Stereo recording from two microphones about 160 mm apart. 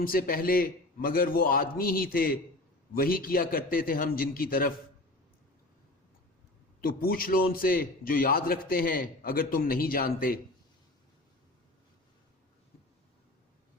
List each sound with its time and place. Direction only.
0.0 s a man's voice: 65° left (ahead or behind)
6.8 s a man's voice: 65° left (ahead or behind)